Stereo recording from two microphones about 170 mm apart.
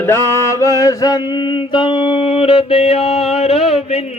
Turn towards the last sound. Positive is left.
turn(degrees=35)  # may be behind; listen again after turning